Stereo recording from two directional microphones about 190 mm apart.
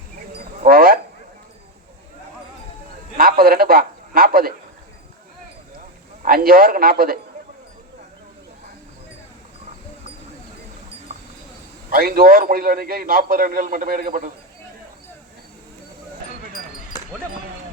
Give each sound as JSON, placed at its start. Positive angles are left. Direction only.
{"t": 0.7, "sound": "a sound", "side_deg": -50}
{"t": 3.2, "sound": "a man's voice", "side_deg": -50}
{"t": 6.2, "sound": "a man's voice", "side_deg": -50}
{"t": 11.9, "sound": "a man's voice", "side_deg": -50}